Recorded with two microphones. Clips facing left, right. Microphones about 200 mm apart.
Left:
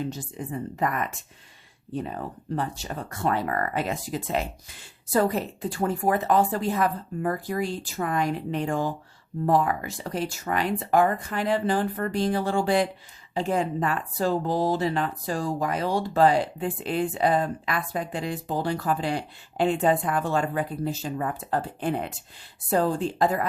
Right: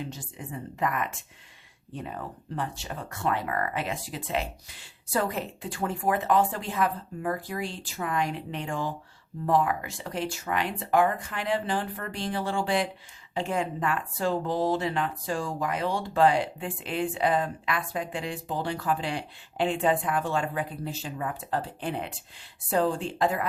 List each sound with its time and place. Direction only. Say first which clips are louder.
0.1 s speech: left 6 dB; 40° left (ahead or behind)
2.6 s speech: left 2 dB; 40° left (ahead or behind)